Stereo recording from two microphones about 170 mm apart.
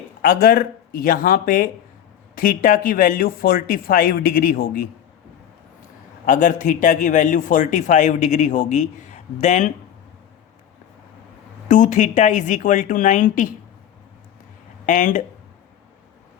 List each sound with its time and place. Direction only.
0.2 s speech: 55° left (ahead or behind)
6.2 s a man's voice: 50° left (ahead or behind)
11.7 s a man's voice: 45° left (ahead or behind)
14.8 s a man's voice: 50° left (ahead or behind)